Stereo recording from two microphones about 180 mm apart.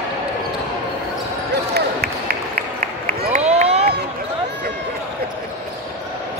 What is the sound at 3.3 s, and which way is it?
Run, 40° right (ahead or behind).